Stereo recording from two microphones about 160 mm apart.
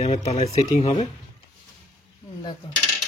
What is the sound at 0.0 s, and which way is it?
Speech, 45° left (ahead or behind).